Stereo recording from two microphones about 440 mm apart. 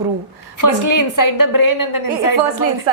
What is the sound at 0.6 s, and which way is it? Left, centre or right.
A woman's voice, left.